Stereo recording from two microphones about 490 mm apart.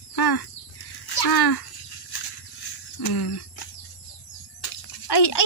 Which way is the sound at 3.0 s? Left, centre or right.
Left.